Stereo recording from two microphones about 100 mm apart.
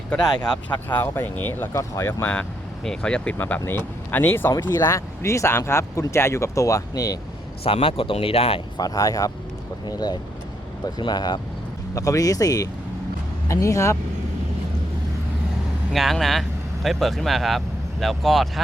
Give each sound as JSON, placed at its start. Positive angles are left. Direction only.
{"t": 0.9, "sound": "speech", "side_deg": 20}
{"t": 2.2, "sound": "speech", "side_deg": 10}
{"t": 7.6, "sound": "speech", "side_deg": 70}
{"t": 8.8, "sound": "speech", "side_deg": 40}
{"t": 15.9, "sound": "speech", "side_deg": 0}